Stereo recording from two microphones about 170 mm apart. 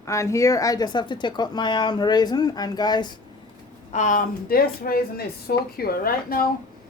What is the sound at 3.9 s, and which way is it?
A woman's voice, 50° left (ahead or behind).